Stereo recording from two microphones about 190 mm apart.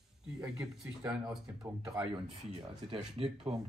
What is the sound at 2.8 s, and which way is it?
Speech, 30° right (ahead or behind).